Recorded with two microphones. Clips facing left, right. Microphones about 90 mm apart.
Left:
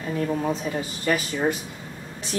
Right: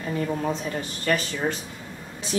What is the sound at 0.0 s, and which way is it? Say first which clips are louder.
Speech: left 1 dB; centre (ahead or behind).